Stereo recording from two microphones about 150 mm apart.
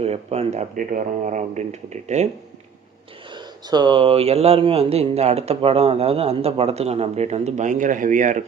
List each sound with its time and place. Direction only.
0.0 s speech: 45° right (ahead or behind)
3.3 s speech: 30° right (ahead or behind); by 8.4 s 60° right (ahead or behind)